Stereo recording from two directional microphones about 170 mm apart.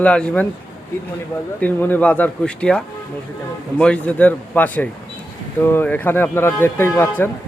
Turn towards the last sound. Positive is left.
turn(degrees=10)  # may be behind; listen again after turning